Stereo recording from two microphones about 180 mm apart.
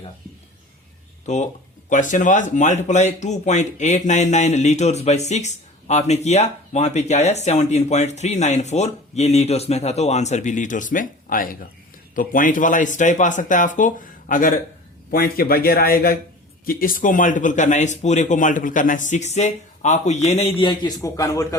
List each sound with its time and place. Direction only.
1.2 s speech: 40° left (ahead or behind); by 21.4 s 20° left (ahead or behind)